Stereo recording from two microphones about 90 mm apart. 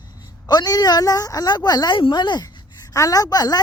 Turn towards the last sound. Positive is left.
turn(degrees=45)  # may be behind; listen again after turning